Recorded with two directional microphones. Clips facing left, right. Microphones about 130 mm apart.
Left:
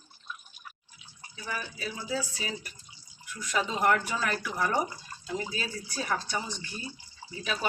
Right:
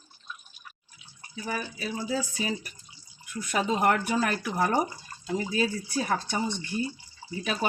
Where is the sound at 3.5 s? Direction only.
55° right (ahead or behind).